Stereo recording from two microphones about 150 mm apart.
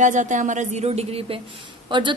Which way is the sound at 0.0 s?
55° right (ahead or behind).